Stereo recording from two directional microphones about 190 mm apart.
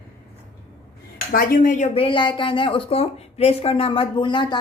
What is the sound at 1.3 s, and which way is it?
Speech, 45° left (ahead or behind).